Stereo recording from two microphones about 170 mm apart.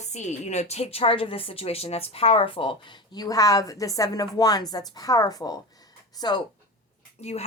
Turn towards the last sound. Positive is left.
turn(degrees=40)  # may be behind; listen again after turning